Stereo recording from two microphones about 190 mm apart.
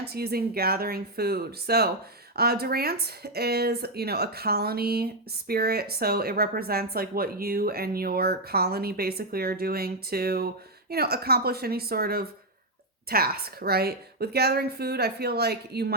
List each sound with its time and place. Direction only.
0.0 s speech: 55° right (ahead or behind)